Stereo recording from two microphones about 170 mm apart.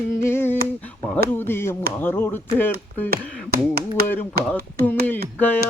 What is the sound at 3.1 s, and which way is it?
Tap, 65° right (ahead or behind).